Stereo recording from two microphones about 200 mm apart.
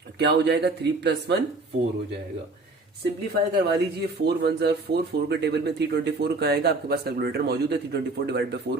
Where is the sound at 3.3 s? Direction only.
55° right (ahead or behind).